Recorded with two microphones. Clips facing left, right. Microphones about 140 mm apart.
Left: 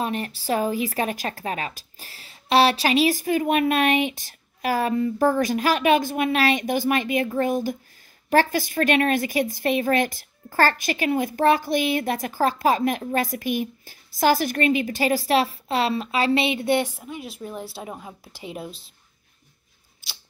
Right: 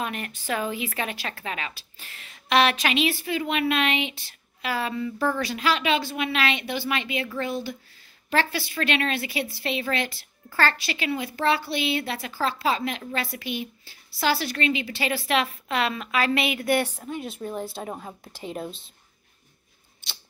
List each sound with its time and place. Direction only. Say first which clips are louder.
0.0 s a woman's voice: left 5 dB; 35° left (ahead or behind)
16.8 s a woman's voice: right 1 dB; 10° left (ahead or behind)